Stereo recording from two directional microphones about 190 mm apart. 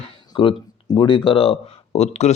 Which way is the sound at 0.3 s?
25° left (ahead or behind).